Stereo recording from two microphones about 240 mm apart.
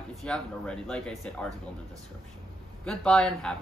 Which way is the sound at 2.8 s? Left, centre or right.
Centre.